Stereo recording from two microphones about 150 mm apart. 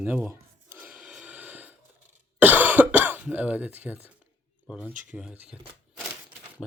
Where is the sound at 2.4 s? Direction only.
10° right (ahead or behind).